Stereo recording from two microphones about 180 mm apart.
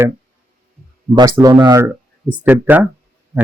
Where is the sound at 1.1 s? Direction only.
20° right (ahead or behind).